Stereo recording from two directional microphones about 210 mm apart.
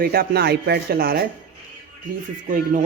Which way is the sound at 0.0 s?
45° right (ahead or behind).